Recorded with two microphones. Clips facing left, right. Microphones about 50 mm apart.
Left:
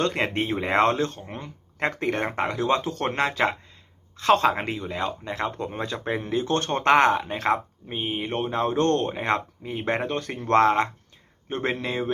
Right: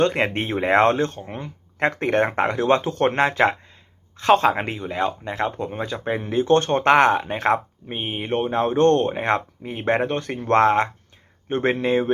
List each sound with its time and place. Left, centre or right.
0.0 s speech: right
2.3 s speech: right
3.2 s speech: right
4.2 s speech: centre
5.6 s speech: centre
6.4 s speech: right
9.1 s speech: right